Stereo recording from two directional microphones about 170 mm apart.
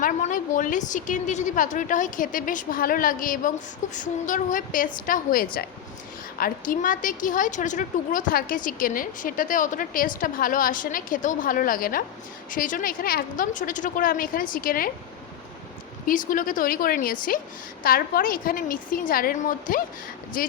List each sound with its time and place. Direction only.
0.0 s a woman's voice: 50° left (ahead or behind)
16.0 s a woman's voice: 50° left (ahead or behind)